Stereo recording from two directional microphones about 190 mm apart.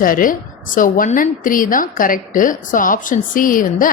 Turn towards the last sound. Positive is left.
turn(degrees=45)  # may be behind; listen again after turning